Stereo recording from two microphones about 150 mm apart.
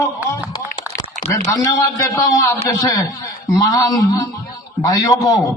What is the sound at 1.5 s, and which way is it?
A man's voice, 20° left (ahead or behind).